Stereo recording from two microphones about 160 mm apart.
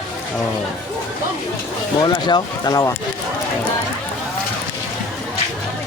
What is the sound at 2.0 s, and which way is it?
Speech, 25° left (ahead or behind).